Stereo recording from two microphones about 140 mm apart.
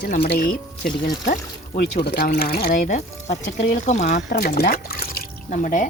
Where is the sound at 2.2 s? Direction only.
90° left.